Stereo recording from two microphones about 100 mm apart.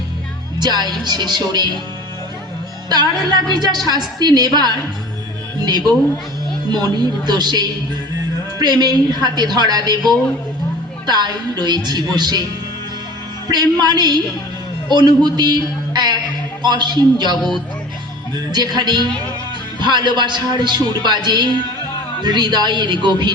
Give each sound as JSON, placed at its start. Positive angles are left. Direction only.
{"t": 0.6, "sound": "a man's voice", "side_deg": -45}
{"t": 2.9, "sound": "a man's voice", "side_deg": -45}
{"t": 8.8, "sound": "a man's voice", "side_deg": -45}
{"t": 11.0, "sound": "a man's voice", "side_deg": -45}
{"t": 13.5, "sound": "a man's voice", "side_deg": -45}
{"t": 17.3, "sound": "speech", "side_deg": 0}
{"t": 18.5, "sound": "a man's voice", "side_deg": -45}